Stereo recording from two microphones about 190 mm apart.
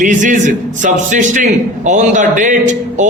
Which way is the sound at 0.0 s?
40° right (ahead or behind).